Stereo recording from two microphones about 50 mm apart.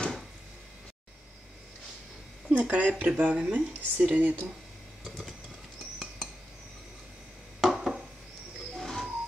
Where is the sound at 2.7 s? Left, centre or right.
Right.